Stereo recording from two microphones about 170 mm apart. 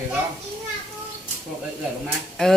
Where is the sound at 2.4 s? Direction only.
5° left (ahead or behind).